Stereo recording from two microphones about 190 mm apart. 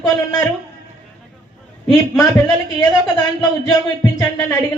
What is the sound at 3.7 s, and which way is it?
Music, 20° left (ahead or behind).